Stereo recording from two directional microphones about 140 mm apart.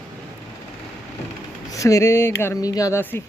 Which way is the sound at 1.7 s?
20° left (ahead or behind).